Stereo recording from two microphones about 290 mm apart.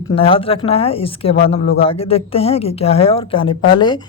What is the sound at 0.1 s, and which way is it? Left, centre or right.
Speech, centre.